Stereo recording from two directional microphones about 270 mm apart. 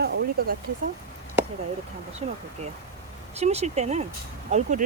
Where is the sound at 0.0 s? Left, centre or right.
Right.